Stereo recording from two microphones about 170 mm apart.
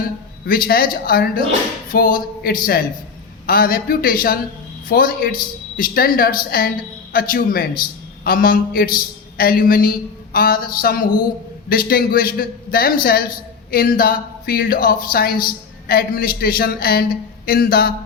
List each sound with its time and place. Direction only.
0.4 s speech: 60° left (ahead or behind)